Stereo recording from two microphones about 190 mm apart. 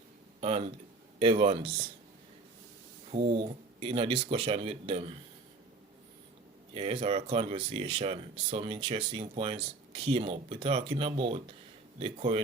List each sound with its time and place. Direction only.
0.4 s speech: 30° right (ahead or behind)
3.1 s speech: 30° right (ahead or behind)
6.7 s speech: 30° right (ahead or behind)